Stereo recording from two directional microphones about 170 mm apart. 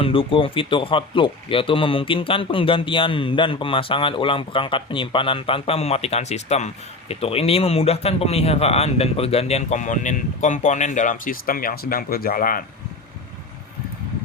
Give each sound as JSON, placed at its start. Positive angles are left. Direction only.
{"t": 0.0, "sound": "speech", "side_deg": 30}